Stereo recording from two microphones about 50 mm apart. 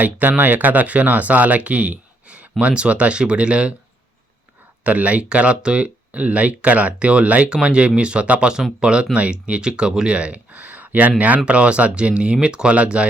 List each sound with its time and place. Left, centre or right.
0.0 s speech: right
4.8 s speech: right